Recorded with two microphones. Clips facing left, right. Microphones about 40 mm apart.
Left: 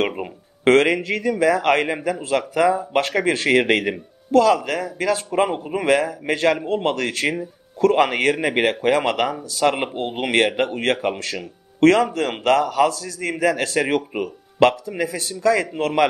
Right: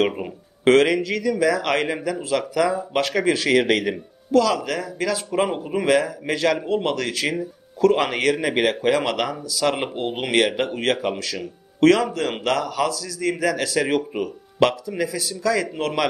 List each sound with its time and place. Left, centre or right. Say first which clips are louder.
0.7 s a man's voice: even; left